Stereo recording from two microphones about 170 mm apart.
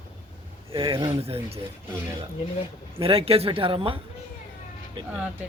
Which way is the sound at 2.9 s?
35° right (ahead or behind).